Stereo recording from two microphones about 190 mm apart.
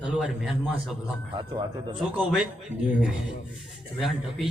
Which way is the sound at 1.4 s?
25° right (ahead or behind).